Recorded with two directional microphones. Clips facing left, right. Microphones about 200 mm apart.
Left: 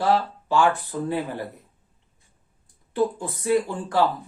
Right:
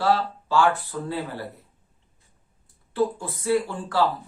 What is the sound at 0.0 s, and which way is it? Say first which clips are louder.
Speech: left 1 dB; 15° left (ahead or behind).